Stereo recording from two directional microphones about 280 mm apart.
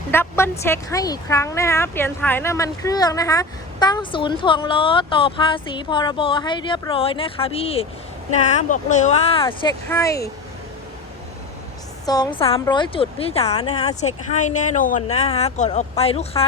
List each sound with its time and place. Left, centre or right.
0.1 s a woman's voice: centre
12.0 s a woman's voice: centre